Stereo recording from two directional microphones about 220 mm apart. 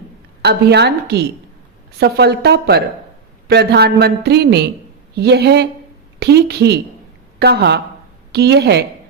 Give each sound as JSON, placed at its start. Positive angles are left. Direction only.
{"t": 0.4, "sound": "speech", "side_deg": -50}